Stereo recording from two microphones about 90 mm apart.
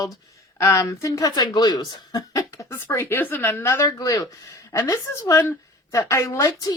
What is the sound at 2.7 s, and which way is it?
Speech, 30° left (ahead or behind).